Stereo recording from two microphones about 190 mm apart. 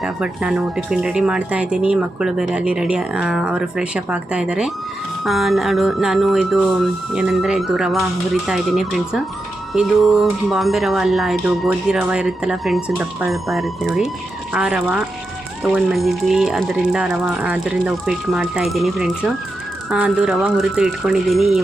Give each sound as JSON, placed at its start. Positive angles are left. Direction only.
{"t": 0.0, "sound": "speech", "side_deg": -5}